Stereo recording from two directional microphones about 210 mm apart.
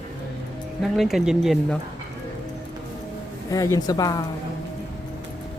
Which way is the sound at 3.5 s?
15° left (ahead or behind).